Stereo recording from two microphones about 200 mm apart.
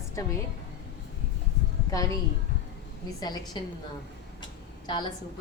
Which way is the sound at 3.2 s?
20° left (ahead or behind).